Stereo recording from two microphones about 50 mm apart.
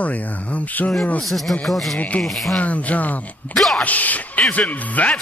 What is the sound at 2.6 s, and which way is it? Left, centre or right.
Speech, left.